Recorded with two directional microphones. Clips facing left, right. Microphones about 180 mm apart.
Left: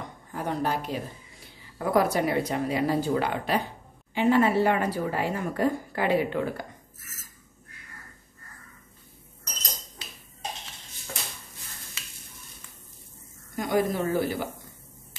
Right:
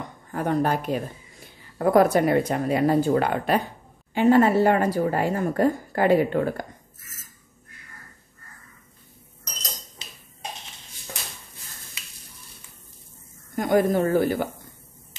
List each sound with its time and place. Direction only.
0.3 s a woman's voice: 55° right (ahead or behind)
13.6 s a woman's voice: 50° right (ahead or behind)